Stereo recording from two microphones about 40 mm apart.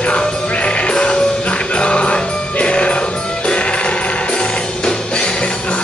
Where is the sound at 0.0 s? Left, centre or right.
Left.